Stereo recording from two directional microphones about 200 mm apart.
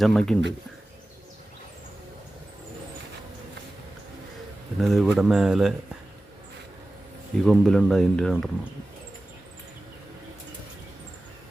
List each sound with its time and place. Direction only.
0.0 s speech: centre (ahead or behind)
4.8 s speech: centre (ahead or behind)
7.4 s speech: centre (ahead or behind)